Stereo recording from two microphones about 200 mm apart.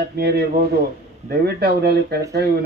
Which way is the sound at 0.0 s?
50° right (ahead or behind).